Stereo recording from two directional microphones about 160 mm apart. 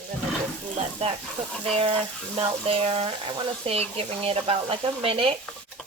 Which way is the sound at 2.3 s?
35° right (ahead or behind).